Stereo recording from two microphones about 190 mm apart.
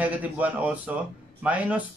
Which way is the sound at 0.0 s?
10° right (ahead or behind).